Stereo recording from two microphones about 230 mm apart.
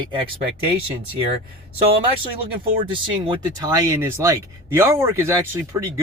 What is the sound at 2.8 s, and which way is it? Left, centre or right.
Speech, right.